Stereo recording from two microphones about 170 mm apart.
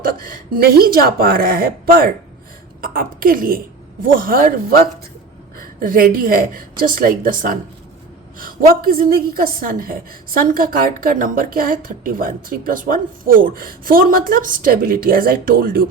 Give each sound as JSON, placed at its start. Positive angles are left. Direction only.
{"t": 0.0, "sound": "a woman's voice", "side_deg": -55}